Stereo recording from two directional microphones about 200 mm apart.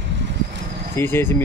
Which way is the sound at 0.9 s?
10° left (ahead or behind).